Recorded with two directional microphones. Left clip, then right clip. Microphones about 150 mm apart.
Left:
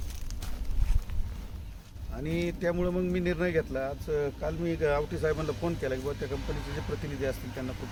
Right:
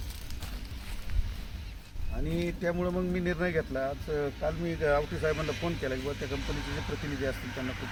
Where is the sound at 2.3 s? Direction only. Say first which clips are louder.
Left 2 dB; 25° left (ahead or behind).